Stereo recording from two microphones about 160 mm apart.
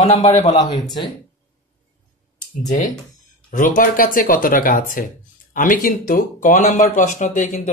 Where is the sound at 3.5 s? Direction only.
55° left (ahead or behind).